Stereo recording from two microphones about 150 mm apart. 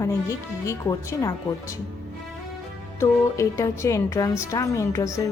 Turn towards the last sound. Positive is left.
turn(degrees=20)  # may be behind; listen again after turning